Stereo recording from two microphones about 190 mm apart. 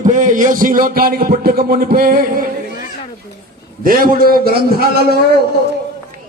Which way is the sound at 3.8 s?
50° right (ahead or behind).